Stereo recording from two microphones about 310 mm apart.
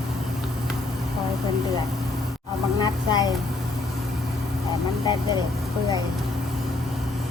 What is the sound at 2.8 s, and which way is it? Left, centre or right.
Child singing, centre.